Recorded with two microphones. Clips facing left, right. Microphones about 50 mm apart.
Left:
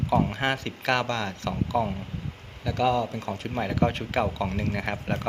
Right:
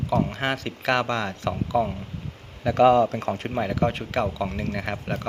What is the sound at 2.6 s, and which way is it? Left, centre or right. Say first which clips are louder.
Speech: right 7 dB; right.